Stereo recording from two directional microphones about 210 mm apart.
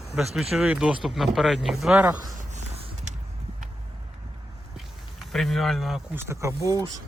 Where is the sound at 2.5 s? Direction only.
35° right (ahead or behind).